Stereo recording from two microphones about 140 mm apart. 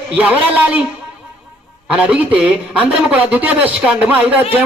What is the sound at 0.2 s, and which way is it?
Speech, 10° right (ahead or behind).